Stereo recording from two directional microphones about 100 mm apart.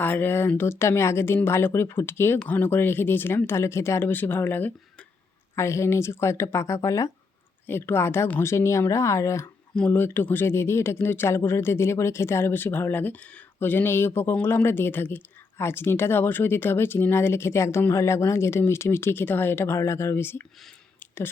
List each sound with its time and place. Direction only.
0.0 s speech: 20° left (ahead or behind)
5.5 s speech: 30° left (ahead or behind)
9.7 s speech: 15° left (ahead or behind)